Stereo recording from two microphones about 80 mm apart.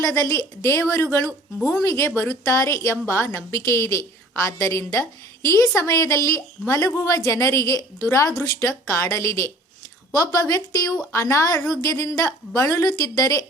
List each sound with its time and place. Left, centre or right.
0.0 s a woman's voice: left
11.7 s a woman's voice: left